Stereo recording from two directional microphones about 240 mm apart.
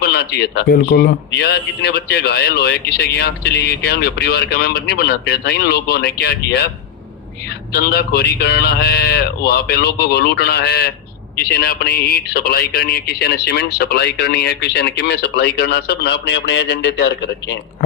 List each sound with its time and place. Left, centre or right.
0.0 s a man's voice: left
7.7 s speech: left